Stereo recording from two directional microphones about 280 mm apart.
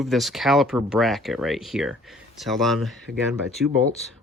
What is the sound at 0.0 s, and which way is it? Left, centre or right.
Speech, centre.